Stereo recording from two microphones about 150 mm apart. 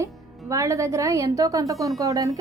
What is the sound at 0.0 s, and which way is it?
A woman's voice, 20° right (ahead or behind).